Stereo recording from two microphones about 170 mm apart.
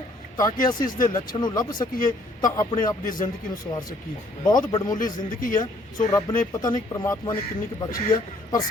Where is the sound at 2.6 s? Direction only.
25° left (ahead or behind).